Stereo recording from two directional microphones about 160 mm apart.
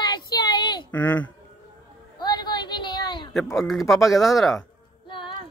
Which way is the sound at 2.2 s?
25° left (ahead or behind).